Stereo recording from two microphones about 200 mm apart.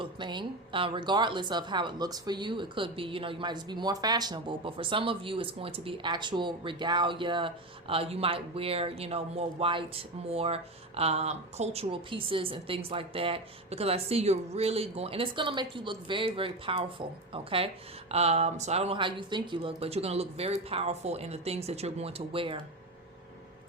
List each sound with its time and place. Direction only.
0.0 s speech: 25° right (ahead or behind)